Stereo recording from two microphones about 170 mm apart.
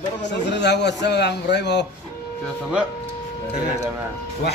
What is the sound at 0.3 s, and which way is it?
A man's voice, 90° left.